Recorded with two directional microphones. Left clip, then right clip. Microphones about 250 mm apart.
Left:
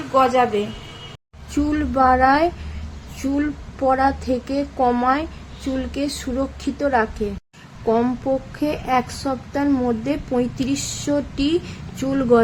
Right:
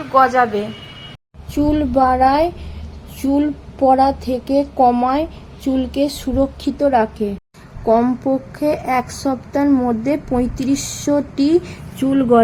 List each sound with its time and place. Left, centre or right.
0.1 s a woman's voice: centre